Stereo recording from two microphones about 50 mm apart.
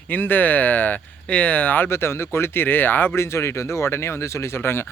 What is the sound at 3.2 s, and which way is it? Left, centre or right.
Speech, left.